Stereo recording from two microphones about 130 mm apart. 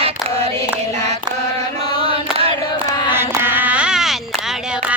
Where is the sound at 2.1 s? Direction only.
45° right (ahead or behind).